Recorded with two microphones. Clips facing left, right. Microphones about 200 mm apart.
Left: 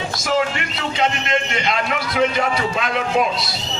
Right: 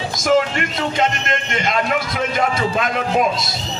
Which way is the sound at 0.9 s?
45° right (ahead or behind).